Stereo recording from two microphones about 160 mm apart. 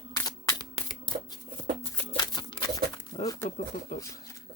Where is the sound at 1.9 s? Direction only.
25° left (ahead or behind).